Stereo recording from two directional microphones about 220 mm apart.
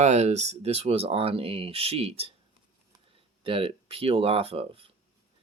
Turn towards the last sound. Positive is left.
turn(degrees=-25)  # may be behind; listen again after turning